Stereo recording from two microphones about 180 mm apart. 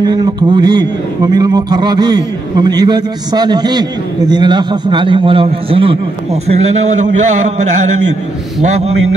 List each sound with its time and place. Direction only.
0.0 s speech: 25° right (ahead or behind)